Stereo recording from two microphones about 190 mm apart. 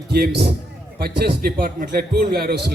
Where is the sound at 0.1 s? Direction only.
60° right (ahead or behind).